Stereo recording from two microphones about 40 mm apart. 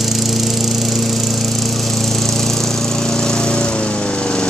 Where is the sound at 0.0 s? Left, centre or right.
Centre.